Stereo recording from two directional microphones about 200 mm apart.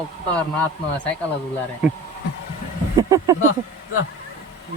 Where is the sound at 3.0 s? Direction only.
15° right (ahead or behind).